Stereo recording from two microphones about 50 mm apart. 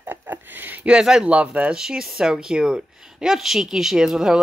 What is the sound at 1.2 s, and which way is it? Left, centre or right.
Speech, right.